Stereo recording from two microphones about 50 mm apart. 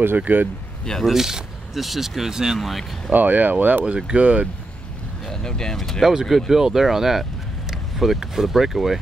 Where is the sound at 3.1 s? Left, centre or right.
Right.